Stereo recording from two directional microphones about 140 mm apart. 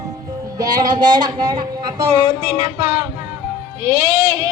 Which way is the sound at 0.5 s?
30° right (ahead or behind).